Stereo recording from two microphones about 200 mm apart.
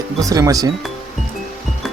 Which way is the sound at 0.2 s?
15° right (ahead or behind).